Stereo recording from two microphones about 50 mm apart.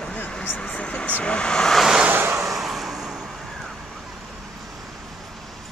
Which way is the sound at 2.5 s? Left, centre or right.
Centre.